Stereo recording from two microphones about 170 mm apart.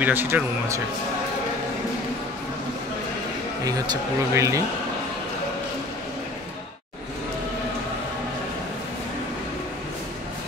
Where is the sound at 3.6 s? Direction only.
20° right (ahead or behind).